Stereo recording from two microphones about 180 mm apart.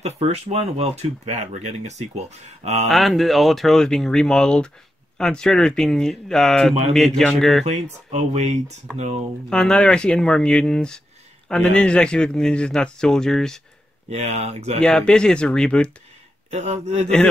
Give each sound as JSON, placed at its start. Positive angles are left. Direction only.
{"t": 0.0, "sound": "speech", "side_deg": -35}
{"t": 2.9, "sound": "speech", "side_deg": 0}
{"t": 7.6, "sound": "speech", "side_deg": -40}
{"t": 9.5, "sound": "speech", "side_deg": 5}
{"t": 14.1, "sound": "speech", "side_deg": -40}
{"t": 14.8, "sound": "speech", "side_deg": 5}
{"t": 16.4, "sound": "speech", "side_deg": -40}